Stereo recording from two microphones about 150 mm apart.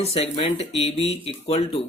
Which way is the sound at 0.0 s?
40° left (ahead or behind).